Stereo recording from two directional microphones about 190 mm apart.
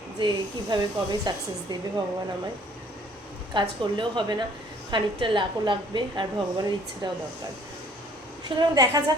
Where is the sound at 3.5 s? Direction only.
25° right (ahead or behind).